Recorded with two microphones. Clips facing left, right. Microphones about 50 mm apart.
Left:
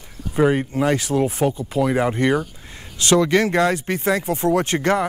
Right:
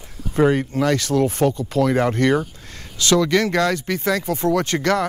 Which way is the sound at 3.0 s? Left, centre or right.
Left.